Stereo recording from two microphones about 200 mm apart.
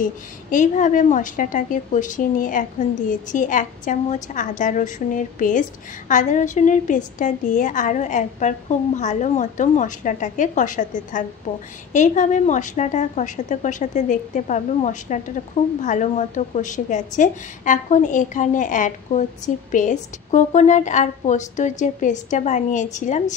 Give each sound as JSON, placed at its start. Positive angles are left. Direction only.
{"t": 0.0, "sound": "a woman's voice", "side_deg": 40}